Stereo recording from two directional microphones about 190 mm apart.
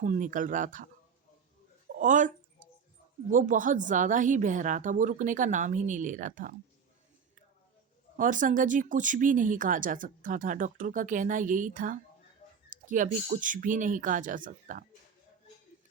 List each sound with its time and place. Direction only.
0.0 s speech: 40° right (ahead or behind)
2.0 s speech: 40° right (ahead or behind)
8.1 s speech: 45° right (ahead or behind)